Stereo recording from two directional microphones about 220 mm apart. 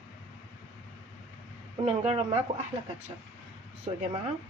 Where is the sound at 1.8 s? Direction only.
25° right (ahead or behind).